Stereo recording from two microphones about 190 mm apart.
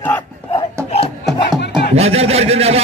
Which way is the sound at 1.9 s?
35° right (ahead or behind).